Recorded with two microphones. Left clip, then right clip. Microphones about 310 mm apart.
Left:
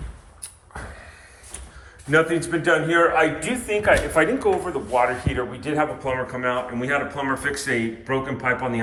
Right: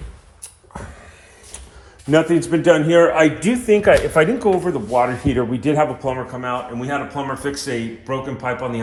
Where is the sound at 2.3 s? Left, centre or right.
Centre.